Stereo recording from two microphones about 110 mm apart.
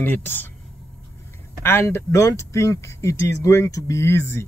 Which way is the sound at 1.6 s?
25° left (ahead or behind).